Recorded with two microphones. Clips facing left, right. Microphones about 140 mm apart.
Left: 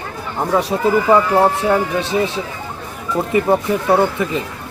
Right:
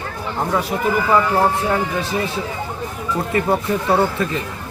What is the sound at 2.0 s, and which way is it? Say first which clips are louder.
Speech: left 3 dB; 25° left (ahead or behind).